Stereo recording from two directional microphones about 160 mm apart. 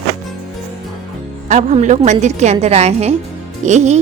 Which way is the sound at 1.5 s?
50° right (ahead or behind).